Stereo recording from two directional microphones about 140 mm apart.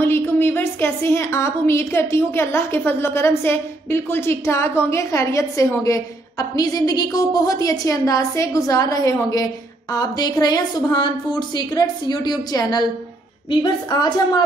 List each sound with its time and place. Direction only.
0.0 s a woman's voice: 15° left (ahead or behind)